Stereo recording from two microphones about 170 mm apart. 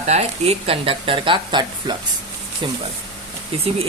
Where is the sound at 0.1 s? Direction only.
35° right (ahead or behind).